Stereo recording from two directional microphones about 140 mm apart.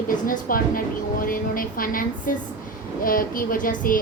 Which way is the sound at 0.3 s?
90° left.